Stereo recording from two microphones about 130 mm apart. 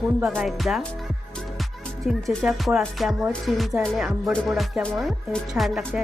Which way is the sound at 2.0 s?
Centre (ahead or behind).